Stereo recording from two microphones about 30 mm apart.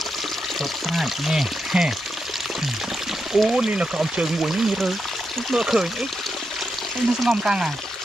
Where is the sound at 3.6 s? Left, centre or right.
Right.